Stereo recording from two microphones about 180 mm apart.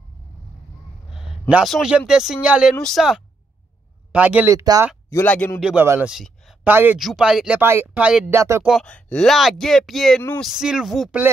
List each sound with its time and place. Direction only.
1.1 s a sound: centre (ahead or behind)
1.5 s speech: centre (ahead or behind)
5.1 s speech: 10° left (ahead or behind)
5.6 s speech: 5° right (ahead or behind)
8.4 s speech: 15° right (ahead or behind)
8.6 s speech: 5° left (ahead or behind)